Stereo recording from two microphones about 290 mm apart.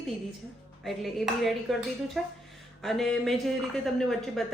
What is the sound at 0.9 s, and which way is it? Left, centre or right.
A woman's voice, centre.